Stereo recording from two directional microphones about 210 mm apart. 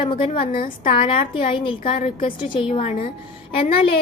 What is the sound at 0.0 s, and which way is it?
A woman's voice, 25° left (ahead or behind).